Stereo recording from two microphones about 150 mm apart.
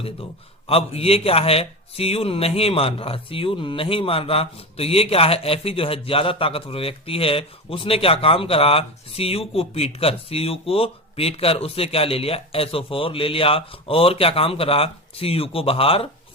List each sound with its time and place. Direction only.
0.7 s speech: 40° left (ahead or behind)